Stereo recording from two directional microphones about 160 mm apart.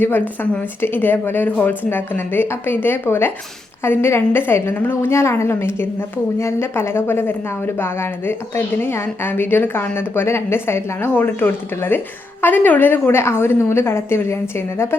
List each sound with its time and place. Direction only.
0.0 s a woman's voice: 10° left (ahead or behind)